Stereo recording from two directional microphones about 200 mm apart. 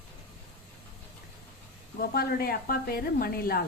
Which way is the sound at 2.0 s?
50° left (ahead or behind).